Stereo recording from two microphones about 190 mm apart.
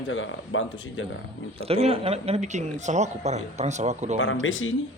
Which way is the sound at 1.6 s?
30° right (ahead or behind).